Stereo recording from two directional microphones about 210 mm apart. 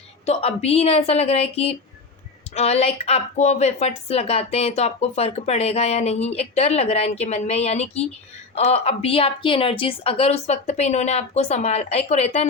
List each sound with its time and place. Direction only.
0.3 s a woman's voice: 30° left (ahead or behind)